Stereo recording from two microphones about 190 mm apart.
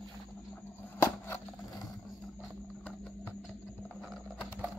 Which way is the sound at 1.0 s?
15° left (ahead or behind).